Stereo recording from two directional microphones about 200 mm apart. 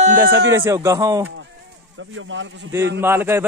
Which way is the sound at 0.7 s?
15° right (ahead or behind).